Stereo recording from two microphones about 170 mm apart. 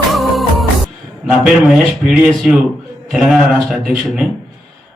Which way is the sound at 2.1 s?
Centre (ahead or behind).